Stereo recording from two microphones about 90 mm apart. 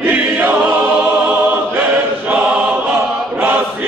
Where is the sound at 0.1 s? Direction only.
20° right (ahead or behind).